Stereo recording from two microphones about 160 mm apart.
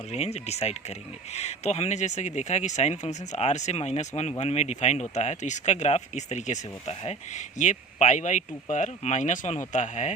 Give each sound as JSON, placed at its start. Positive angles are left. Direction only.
{"t": 0.1, "sound": "speech", "side_deg": 40}